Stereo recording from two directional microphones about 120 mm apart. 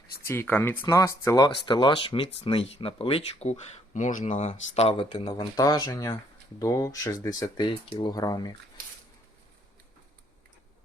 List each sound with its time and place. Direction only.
0.3 s speech: 15° left (ahead or behind)
0.9 s speech: 25° left (ahead or behind)
1.4 s speech: 40° left (ahead or behind); by 4.9 s 60° left (ahead or behind)
4.9 s speech: 45° left (ahead or behind)
5.5 s speech: 30° left (ahead or behind)